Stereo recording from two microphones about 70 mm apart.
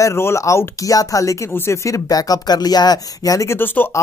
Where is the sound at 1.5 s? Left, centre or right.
Left.